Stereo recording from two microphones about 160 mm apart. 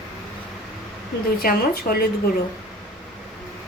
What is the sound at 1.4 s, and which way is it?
Speech, 70° left (ahead or behind).